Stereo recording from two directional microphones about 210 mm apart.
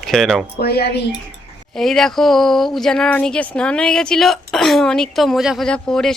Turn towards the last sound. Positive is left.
turn(degrees=5)  # may be behind; listen again after turning